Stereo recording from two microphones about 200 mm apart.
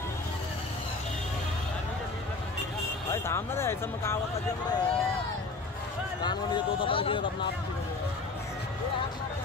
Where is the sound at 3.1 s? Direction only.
10° left (ahead or behind).